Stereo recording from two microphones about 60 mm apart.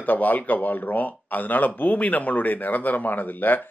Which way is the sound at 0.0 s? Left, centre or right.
Left.